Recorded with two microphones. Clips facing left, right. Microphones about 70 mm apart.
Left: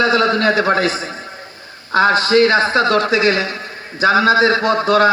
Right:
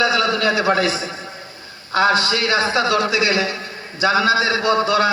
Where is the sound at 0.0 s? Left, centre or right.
Left.